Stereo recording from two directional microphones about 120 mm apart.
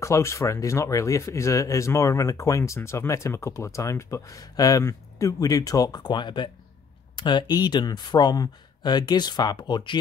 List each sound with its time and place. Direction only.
0.0 s speech: 25° left (ahead or behind); by 9.9 s 40° left (ahead or behind)